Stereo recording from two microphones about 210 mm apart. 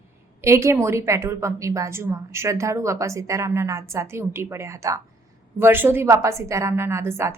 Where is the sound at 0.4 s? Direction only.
15° right (ahead or behind).